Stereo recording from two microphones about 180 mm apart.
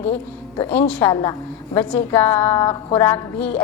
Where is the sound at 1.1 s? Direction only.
20° left (ahead or behind).